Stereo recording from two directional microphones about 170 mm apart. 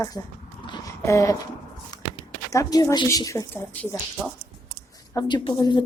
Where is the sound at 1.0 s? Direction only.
20° left (ahead or behind).